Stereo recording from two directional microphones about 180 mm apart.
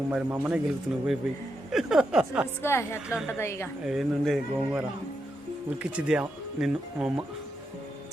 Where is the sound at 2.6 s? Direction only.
15° left (ahead or behind).